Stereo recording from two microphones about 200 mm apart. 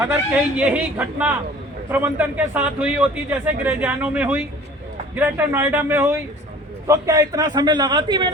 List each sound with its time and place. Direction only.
0.0 s a man's voice: 10° right (ahead or behind)